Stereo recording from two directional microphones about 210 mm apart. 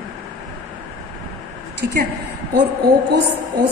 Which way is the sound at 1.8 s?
50° right (ahead or behind).